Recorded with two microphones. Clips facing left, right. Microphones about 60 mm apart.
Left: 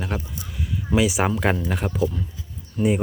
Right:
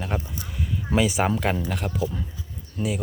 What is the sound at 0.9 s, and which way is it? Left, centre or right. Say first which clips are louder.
Speech: left 2 dB; centre.